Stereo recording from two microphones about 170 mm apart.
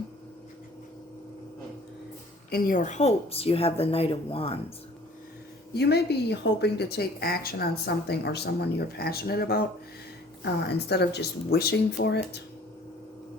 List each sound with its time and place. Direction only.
2.5 s speech: 55° left (ahead or behind); by 4.5 s 35° left (ahead or behind)
5.7 s speech: 75° left (ahead or behind)
10.4 s speech: 80° left